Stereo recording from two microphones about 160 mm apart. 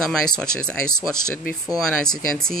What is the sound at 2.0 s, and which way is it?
Speech, 5° left (ahead or behind).